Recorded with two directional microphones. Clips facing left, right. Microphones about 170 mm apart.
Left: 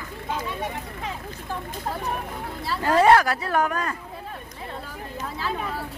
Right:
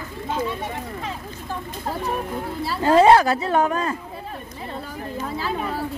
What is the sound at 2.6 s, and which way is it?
Speech, 25° right (ahead or behind).